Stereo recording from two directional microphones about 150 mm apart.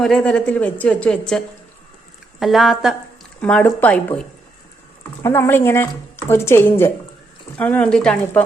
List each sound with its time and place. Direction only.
0.0 s a woman's voice: 5° left (ahead or behind)
2.4 s speech: centre (ahead or behind)
3.4 s a woman's voice: 10° left (ahead or behind)